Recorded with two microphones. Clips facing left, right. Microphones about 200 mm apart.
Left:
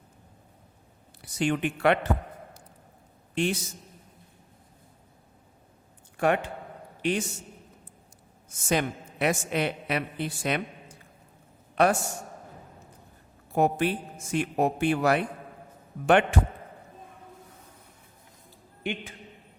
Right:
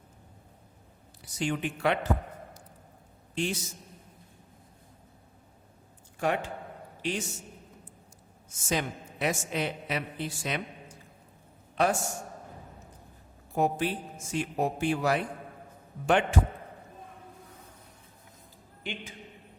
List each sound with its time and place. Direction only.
1.2 s a woman's voice: 60° left (ahead or behind)
3.3 s a woman's voice: 60° left (ahead or behind)
6.1 s a woman's voice: 60° left (ahead or behind)
8.7 s a woman's voice: 60° left (ahead or behind)
11.7 s a man's voice: 60° left (ahead or behind)
13.5 s a woman's voice: 65° left (ahead or behind)
18.8 s a sound: 60° left (ahead or behind)